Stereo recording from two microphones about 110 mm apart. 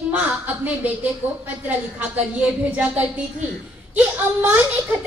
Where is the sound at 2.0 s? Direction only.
10° right (ahead or behind).